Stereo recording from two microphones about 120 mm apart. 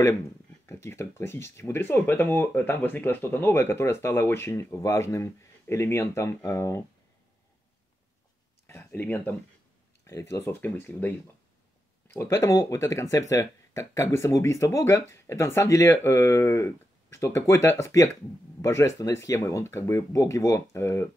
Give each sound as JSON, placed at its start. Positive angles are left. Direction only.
{"t": 0.7, "sound": "speech", "side_deg": 20}
{"t": 8.6, "sound": "a sound", "side_deg": 20}
{"t": 10.0, "sound": "speech", "side_deg": 25}